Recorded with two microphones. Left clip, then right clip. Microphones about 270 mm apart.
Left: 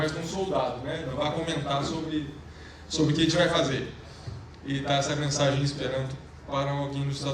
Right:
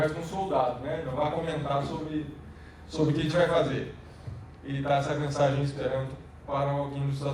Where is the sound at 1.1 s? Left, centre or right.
Centre.